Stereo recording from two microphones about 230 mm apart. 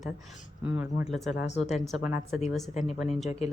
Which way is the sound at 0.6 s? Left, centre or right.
Centre.